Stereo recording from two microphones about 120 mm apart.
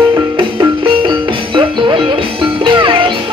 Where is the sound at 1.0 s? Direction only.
45° right (ahead or behind).